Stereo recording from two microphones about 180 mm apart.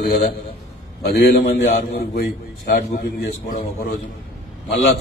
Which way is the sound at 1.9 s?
65° left (ahead or behind).